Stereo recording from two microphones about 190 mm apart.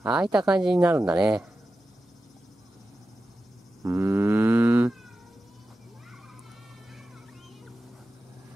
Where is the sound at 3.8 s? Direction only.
15° right (ahead or behind).